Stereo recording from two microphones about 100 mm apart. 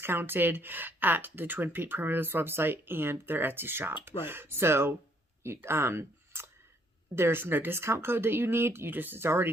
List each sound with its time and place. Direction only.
0.0 s speech: 20° right (ahead or behind)
5.4 s a sound: 25° right (ahead or behind)
7.2 s speech: 25° right (ahead or behind)